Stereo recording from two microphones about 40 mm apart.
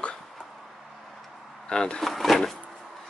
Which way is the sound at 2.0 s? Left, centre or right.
Centre.